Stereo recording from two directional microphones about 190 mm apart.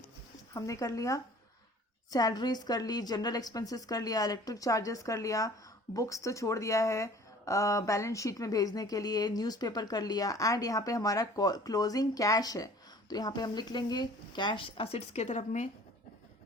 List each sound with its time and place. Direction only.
0.5 s speech: 15° left (ahead or behind); by 15.7 s 40° left (ahead or behind)